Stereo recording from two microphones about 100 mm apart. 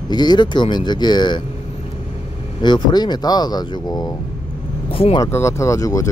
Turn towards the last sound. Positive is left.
turn(degrees=35)  # may be behind; listen again after turning